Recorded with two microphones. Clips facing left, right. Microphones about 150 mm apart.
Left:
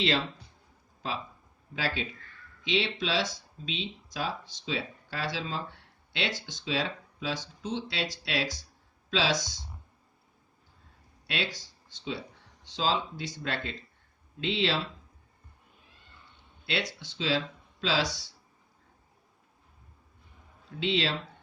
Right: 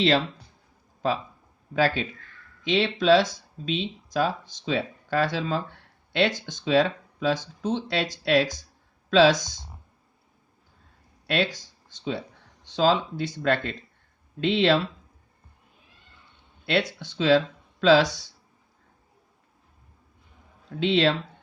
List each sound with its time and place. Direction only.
1.7 s speech: 45° right (ahead or behind)
11.3 s speech: 50° right (ahead or behind)
12.6 s speech: 50° right (ahead or behind)
16.6 s speech: 50° right (ahead or behind)
20.7 s speech: 45° right (ahead or behind)